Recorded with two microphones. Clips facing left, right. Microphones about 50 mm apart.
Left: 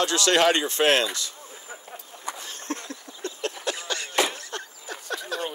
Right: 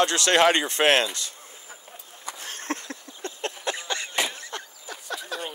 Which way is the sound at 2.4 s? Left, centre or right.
Right.